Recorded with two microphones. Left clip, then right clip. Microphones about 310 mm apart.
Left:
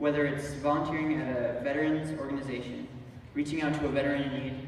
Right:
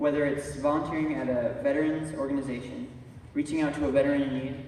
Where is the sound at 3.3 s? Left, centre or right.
Centre.